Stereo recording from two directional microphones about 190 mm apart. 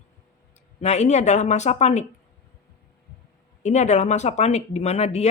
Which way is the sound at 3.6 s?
40° left (ahead or behind).